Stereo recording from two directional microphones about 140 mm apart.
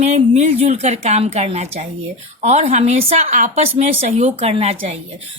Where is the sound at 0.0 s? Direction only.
50° right (ahead or behind).